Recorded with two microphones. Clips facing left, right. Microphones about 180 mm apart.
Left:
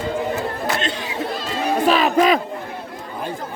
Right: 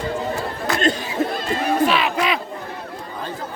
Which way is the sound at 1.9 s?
40° left (ahead or behind).